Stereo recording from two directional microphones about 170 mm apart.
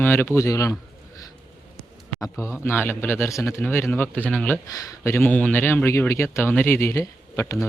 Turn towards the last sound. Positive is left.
turn(degrees=15)  # may be behind; listen again after turning